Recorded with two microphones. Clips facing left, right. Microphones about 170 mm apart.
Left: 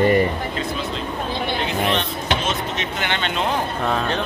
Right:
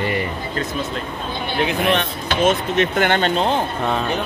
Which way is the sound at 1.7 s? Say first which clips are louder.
Right 2 dB; 55° right (ahead or behind).